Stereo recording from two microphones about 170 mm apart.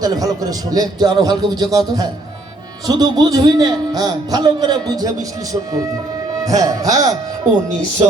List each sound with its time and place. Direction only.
0.0 s a man's voice: 20° right (ahead or behind)
2.8 s a man's voice: 20° right (ahead or behind)
6.4 s a man's voice: 20° right (ahead or behind)